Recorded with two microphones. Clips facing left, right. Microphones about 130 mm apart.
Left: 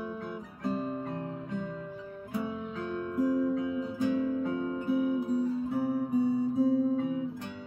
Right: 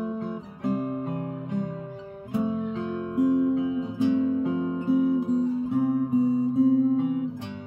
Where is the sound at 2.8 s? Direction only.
20° right (ahead or behind).